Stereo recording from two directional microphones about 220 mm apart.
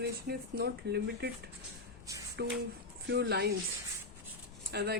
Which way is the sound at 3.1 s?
45° right (ahead or behind).